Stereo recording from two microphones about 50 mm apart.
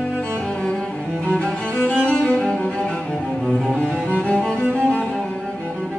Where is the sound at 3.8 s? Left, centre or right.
Left.